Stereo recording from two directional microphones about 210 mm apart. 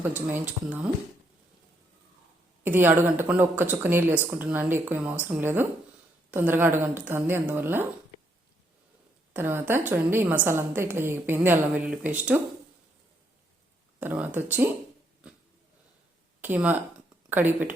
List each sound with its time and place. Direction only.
0.3 s a woman's voice: 10° right (ahead or behind)
2.6 s a woman's voice: 10° right (ahead or behind)
9.3 s a woman's voice: 10° right (ahead or behind)
14.0 s a woman's voice: 10° right (ahead or behind)
16.4 s speech: 10° right (ahead or behind)